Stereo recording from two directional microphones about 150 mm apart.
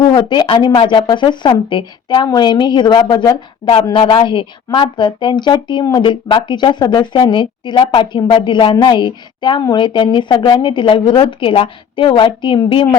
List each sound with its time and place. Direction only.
0.1 s a woman's voice: 30° left (ahead or behind)